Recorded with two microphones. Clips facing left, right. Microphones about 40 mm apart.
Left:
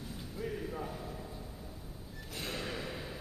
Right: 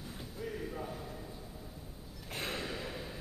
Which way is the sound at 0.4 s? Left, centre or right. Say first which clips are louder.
Left 2 dB; centre.